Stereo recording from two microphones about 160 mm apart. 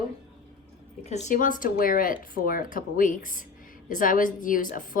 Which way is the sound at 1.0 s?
45° left (ahead or behind).